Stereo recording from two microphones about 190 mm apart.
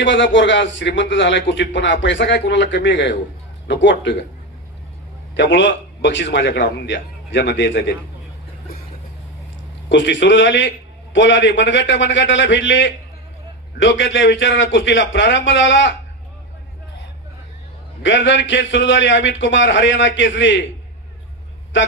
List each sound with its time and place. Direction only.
0.0 s a man's voice: 75° left (ahead or behind)
5.3 s a man's voice: 70° left (ahead or behind)
9.9 s a man's voice: 75° left (ahead or behind)
18.0 s a man's voice: 75° left (ahead or behind)
21.7 s a man's voice: 75° left (ahead or behind)